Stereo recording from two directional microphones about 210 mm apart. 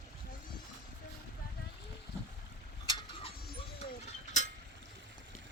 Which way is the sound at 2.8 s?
25° left (ahead or behind).